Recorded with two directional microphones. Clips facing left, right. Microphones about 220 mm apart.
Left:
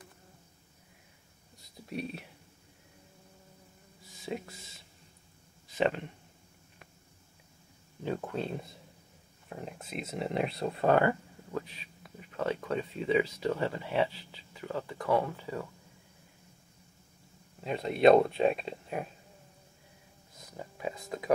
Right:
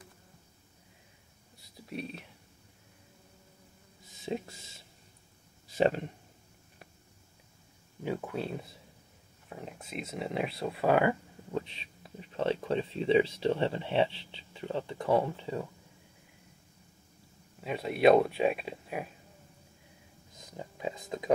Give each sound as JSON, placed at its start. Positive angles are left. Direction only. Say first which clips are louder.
{"t": 1.9, "sound": "speech", "louder": "left 2 dB", "side_deg": 0}
{"t": 4.3, "sound": "speech", "louder": "right 2 dB", "side_deg": -25}
{"t": 5.8, "sound": "speech", "louder": "right 2 dB", "side_deg": -35}
{"t": 8.2, "sound": "speech", "louder": "even", "side_deg": -5}
{"t": 11.5, "sound": "speech", "louder": "right 2 dB", "side_deg": -25}
{"t": 17.6, "sound": "speech", "louder": "left 1 dB", "side_deg": -5}
{"t": 20.5, "sound": "speech", "louder": "right 1 dB", "side_deg": -20}